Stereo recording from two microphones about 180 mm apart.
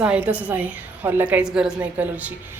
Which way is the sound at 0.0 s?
5° right (ahead or behind).